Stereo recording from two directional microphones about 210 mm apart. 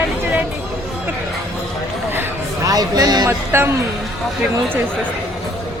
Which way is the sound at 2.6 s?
15° right (ahead or behind).